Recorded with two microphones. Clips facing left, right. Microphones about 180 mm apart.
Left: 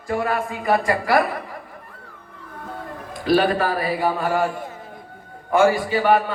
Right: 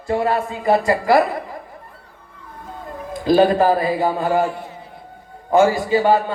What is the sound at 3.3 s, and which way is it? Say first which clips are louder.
Speech: right 5 dB; 20° right (ahead or behind).